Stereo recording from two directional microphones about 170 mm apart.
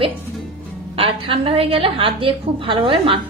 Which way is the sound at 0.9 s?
35° right (ahead or behind).